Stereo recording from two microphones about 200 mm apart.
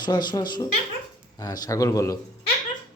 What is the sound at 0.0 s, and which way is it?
A man's voice, 20° left (ahead or behind).